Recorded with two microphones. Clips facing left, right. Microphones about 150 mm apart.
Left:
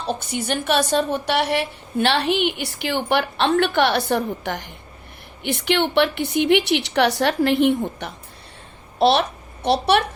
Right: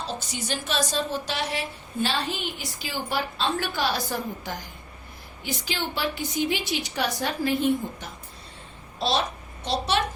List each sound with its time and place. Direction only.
0.0 s a woman's voice: 60° left (ahead or behind)